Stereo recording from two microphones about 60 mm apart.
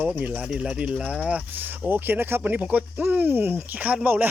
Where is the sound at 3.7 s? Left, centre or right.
Right.